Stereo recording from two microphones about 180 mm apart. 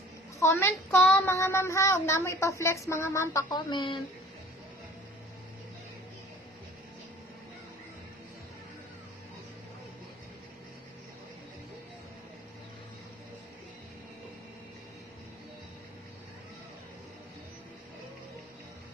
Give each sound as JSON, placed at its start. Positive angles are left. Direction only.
{"t": 0.3, "sound": "a child's voice", "side_deg": 15}
{"t": 0.9, "sound": "child singing", "side_deg": 5}